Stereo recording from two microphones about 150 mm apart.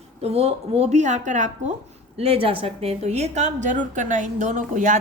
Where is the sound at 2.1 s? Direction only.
40° right (ahead or behind).